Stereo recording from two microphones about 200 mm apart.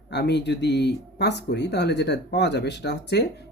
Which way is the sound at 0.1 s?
60° left (ahead or behind).